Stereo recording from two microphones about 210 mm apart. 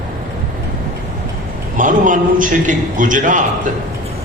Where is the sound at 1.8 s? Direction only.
40° right (ahead or behind).